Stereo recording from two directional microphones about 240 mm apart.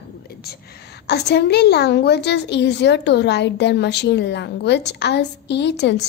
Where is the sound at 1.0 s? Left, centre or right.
Left.